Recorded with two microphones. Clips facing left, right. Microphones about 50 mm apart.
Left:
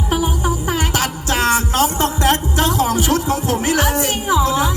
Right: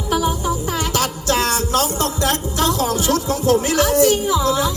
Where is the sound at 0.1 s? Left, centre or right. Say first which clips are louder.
Right 1 dB; left.